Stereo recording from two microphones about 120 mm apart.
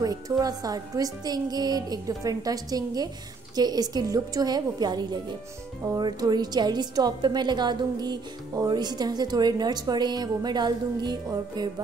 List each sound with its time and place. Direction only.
0.0 s a woman's voice: 30° right (ahead or behind)